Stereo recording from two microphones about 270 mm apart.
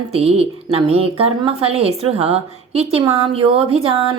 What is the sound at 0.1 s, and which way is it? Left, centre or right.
A woman's voice, right.